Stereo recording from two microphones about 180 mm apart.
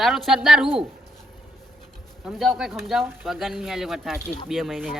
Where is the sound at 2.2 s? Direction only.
Centre (ahead or behind).